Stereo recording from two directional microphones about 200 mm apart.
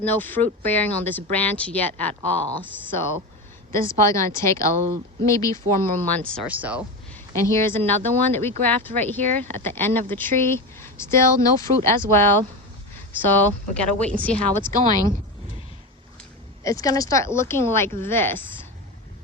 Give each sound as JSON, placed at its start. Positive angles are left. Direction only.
{"t": 0.0, "sound": "speech", "side_deg": 10}
{"t": 3.8, "sound": "speech", "side_deg": 15}
{"t": 6.3, "sound": "speech", "side_deg": -5}
{"t": 7.1, "sound": "speech", "side_deg": 15}
{"t": 16.6, "sound": "speech", "side_deg": 15}